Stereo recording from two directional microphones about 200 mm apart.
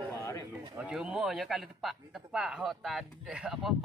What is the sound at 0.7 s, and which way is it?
Speech, 5° right (ahead or behind).